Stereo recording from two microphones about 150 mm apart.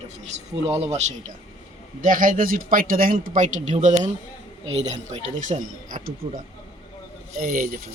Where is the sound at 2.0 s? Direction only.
65° right (ahead or behind).